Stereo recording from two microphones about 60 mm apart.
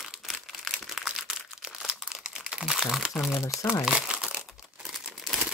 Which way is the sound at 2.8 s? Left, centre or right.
Centre.